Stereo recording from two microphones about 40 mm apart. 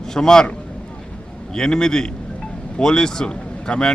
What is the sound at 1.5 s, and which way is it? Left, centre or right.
A man's voice, centre.